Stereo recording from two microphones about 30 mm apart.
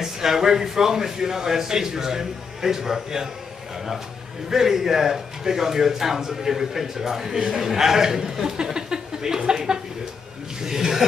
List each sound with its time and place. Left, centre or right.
0.0 s speech: centre
4.5 s speech: centre